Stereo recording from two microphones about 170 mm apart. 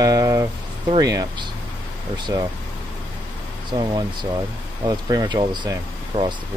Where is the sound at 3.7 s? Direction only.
25° right (ahead or behind).